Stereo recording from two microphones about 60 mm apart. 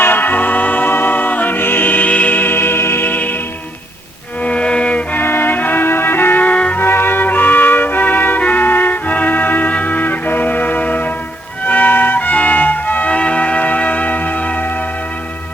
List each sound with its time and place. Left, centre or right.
0.0 s music: left
4.4 s music: centre
5.1 s music: left
6.7 s music: left